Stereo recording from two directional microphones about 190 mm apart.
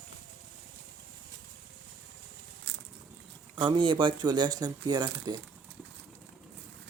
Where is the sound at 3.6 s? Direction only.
25° right (ahead or behind).